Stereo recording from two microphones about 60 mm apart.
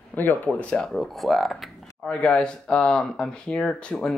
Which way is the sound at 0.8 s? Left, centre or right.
Centre.